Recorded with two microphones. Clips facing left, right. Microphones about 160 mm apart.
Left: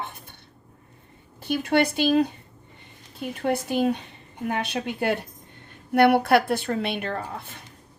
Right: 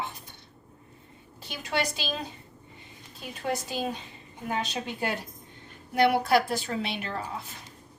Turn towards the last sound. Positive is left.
turn(degrees=55)  # may be behind; listen again after turning